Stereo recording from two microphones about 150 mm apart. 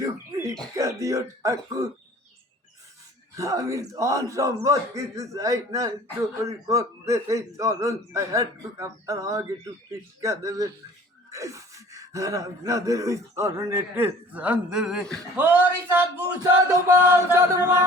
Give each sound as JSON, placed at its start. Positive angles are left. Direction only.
{"t": 0.0, "sound": "cough", "side_deg": -20}
{"t": 0.8, "sound": "speech", "side_deg": -20}
{"t": 3.3, "sound": "speech", "side_deg": -20}
{"t": 15.4, "sound": "speech", "side_deg": -15}